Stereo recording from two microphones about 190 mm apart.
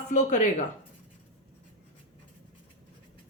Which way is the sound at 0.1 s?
40° left (ahead or behind).